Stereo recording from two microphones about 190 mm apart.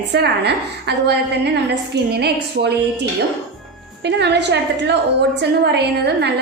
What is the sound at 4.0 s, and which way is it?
A woman's voice, 65° right (ahead or behind).